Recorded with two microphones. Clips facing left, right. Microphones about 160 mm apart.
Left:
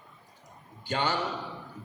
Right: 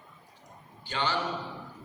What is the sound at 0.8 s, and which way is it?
Speech, 45° left (ahead or behind).